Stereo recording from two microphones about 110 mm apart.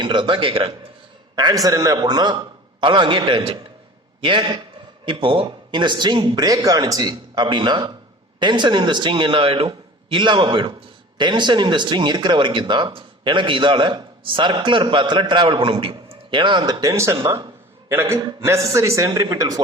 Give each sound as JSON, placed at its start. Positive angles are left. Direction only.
{"t": 0.0, "sound": "speech", "side_deg": -45}
{"t": 1.4, "sound": "a man's voice", "side_deg": -35}
{"t": 16.8, "sound": "a man's voice", "side_deg": -25}
{"t": 18.2, "sound": "speech", "side_deg": -45}
{"t": 18.4, "sound": "a man's voice", "side_deg": -25}